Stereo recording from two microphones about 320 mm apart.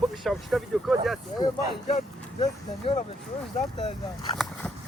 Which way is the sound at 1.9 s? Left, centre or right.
Centre.